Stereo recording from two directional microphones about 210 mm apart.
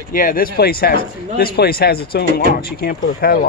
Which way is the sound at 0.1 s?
40° left (ahead or behind).